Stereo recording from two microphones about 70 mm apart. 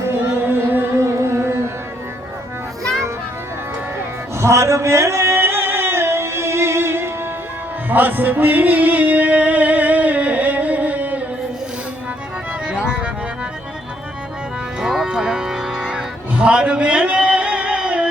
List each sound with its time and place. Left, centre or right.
0.4 s music: right
0.9 s music: right
4.4 s a sound: right
7.9 s music: right
12.6 s music: centre
14.8 s music: centre